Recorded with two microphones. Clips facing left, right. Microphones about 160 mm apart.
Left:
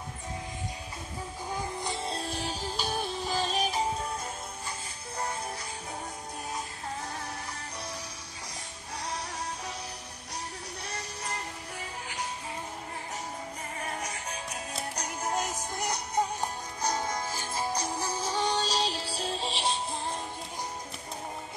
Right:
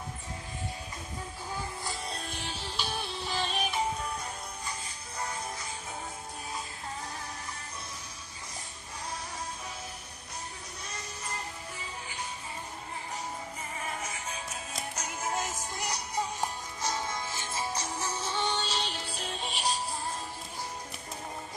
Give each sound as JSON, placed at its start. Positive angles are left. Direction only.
{"t": 1.8, "sound": "music", "side_deg": 25}
{"t": 15.7, "sound": "music", "side_deg": 50}
{"t": 16.8, "sound": "music", "side_deg": 40}